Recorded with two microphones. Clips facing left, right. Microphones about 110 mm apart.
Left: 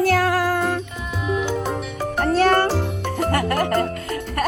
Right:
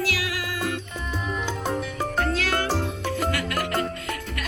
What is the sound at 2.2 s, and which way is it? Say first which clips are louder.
Music: left 9 dB; 50° left (ahead or behind).